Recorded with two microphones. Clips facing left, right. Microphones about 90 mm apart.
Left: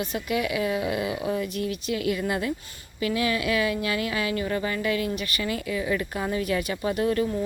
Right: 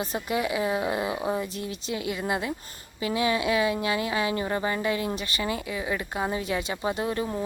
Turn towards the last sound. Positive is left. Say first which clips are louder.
# left 3 dB
turn(degrees=-20)  # may be behind; listen again after turning